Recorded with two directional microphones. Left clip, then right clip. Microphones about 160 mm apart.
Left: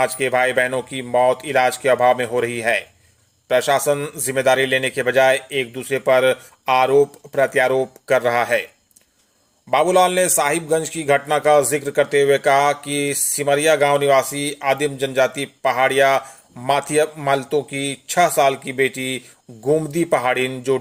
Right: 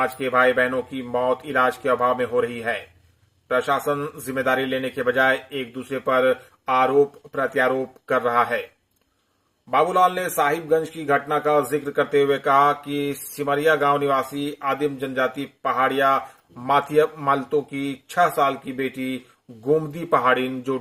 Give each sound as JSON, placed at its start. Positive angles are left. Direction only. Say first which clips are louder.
{"t": 0.0, "sound": "a man's voice", "louder": "left 1 dB", "side_deg": 45}
{"t": 9.6, "sound": "a man's voice", "louder": "left 3 dB", "side_deg": 45}